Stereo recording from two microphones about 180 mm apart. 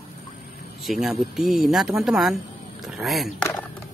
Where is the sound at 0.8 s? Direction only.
Centre (ahead or behind).